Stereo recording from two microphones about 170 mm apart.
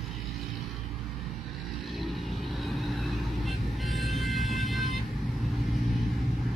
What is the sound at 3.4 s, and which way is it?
Vehicle, centre (ahead or behind).